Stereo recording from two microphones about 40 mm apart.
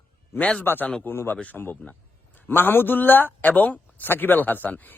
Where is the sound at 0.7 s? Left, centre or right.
Left.